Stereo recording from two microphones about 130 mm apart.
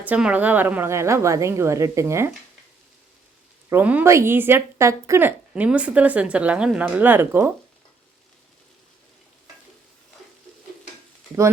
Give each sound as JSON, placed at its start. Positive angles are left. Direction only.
{"t": 0.0, "sound": "a woman's voice", "side_deg": -10}
{"t": 3.7, "sound": "speech", "side_deg": -15}